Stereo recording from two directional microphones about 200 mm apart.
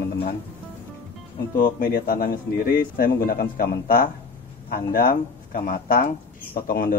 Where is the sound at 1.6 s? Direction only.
45° left (ahead or behind).